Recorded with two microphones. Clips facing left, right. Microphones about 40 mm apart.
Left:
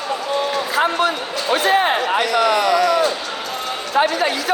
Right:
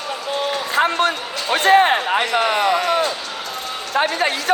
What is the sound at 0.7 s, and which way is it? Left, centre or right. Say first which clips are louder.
Speech: right 1 dB; right.